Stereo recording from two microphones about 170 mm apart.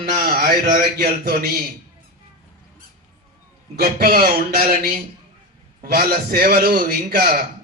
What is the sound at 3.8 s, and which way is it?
A man's voice, 60° right (ahead or behind).